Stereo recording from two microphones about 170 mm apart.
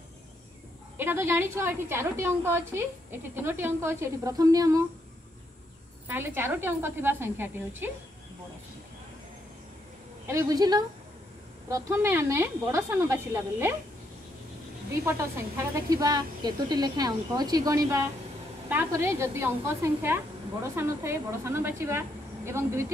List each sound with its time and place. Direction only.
0.9 s a woman's voice: 15° right (ahead or behind)
6.0 s a woman's voice: 10° right (ahead or behind)
10.2 s a woman's voice: 20° right (ahead or behind)
14.9 s a woman's voice: 15° right (ahead or behind)